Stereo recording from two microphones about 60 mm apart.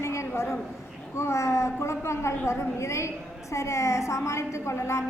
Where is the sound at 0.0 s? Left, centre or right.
Left.